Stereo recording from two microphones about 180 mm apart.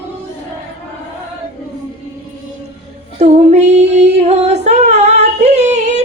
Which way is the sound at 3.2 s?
40° right (ahead or behind).